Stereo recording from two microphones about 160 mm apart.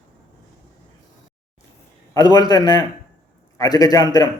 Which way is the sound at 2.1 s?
25° left (ahead or behind).